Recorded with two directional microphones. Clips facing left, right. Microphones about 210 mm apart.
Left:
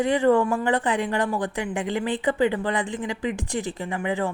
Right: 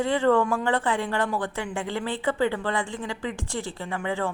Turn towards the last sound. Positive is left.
turn(degrees=15)  # may be behind; listen again after turning